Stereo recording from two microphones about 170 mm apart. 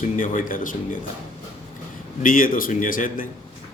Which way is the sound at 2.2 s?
55° left (ahead or behind).